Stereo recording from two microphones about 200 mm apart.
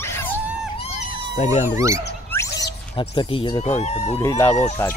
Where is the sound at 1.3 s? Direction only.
35° left (ahead or behind).